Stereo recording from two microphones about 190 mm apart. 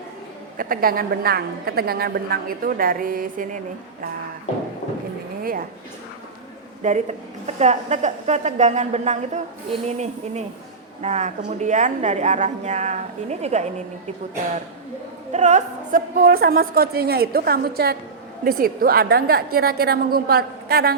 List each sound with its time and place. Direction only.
0.5 s a woman's voice: 50° right (ahead or behind)
5.4 s a sound: 50° right (ahead or behind)
6.8 s a woman's voice: 35° right (ahead or behind)
11.0 s a woman's voice: 40° right (ahead or behind)
15.3 s a woman's voice: 40° right (ahead or behind); by 20.9 s 55° right (ahead or behind)